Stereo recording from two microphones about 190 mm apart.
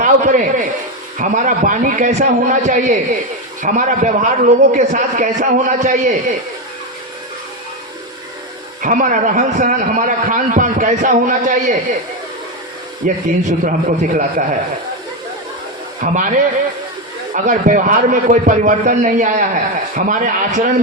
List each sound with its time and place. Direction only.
0.0 s a man's voice: 40° right (ahead or behind)
8.8 s a man's voice: 40° right (ahead or behind)
13.2 s a man's voice: 45° right (ahead or behind)
16.0 s a man's voice: 45° right (ahead or behind)
17.3 s a man's voice: 40° right (ahead or behind)